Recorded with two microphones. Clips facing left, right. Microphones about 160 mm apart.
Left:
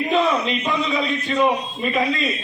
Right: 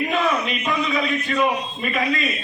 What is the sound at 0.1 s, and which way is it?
A man's voice, 25° left (ahead or behind).